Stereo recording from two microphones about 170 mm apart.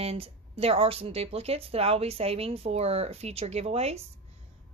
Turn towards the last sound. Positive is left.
turn(degrees=-40)  # may be behind; listen again after turning